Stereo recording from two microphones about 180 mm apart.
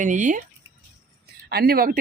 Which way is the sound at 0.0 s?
45° right (ahead or behind).